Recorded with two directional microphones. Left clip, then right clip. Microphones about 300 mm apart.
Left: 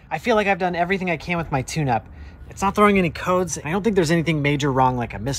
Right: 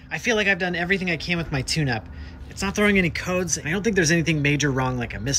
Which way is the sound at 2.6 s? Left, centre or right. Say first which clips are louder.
Left 4 dB; centre.